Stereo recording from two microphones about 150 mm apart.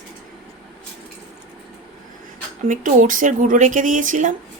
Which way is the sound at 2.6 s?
60° right (ahead or behind).